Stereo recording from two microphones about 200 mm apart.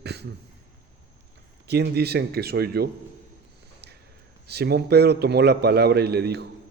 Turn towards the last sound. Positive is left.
turn(degrees=-55)  # may be behind; listen again after turning